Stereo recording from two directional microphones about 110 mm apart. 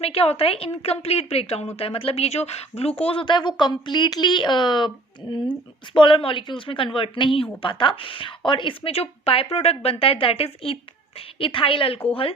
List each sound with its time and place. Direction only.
0.0 s a woman's voice: 65° left (ahead or behind); by 4.9 s 45° left (ahead or behind)
5.9 s a woman's voice: 50° left (ahead or behind)